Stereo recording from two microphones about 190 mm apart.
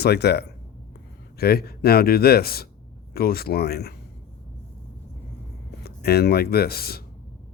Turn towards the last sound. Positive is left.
turn(degrees=55)  # may be behind; listen again after turning